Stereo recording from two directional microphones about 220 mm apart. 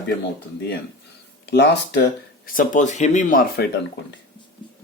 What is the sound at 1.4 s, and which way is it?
Speech, 50° left (ahead or behind).